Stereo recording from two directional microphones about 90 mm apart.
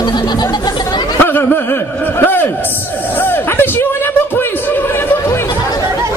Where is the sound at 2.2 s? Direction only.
20° left (ahead or behind).